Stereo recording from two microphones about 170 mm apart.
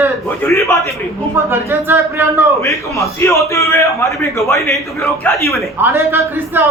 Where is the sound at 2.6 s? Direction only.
20° left (ahead or behind).